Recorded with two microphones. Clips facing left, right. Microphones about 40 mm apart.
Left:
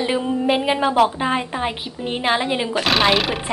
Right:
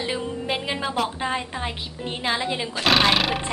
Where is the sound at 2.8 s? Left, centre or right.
Centre.